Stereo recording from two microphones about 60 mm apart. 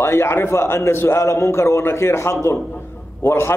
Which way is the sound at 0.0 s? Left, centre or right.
Left.